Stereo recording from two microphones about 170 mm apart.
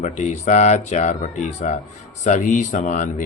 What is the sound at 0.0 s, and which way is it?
Speech, 40° left (ahead or behind).